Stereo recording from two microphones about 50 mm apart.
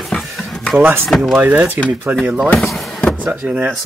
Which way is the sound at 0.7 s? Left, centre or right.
Right.